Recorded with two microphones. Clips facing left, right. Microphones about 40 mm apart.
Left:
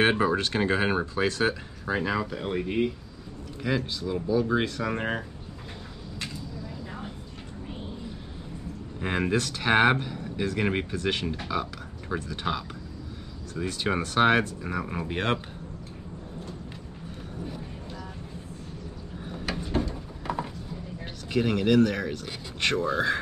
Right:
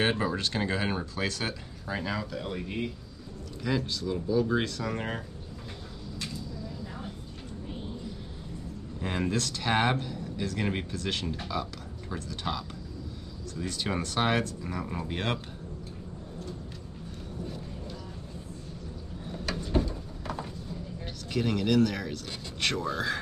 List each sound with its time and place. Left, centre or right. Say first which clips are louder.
0.1 s speech: left 5 dB; left
9.0 s speech: left 4 dB; left
19.3 s a sound: even; centre
21.3 s speech: left 4 dB; centre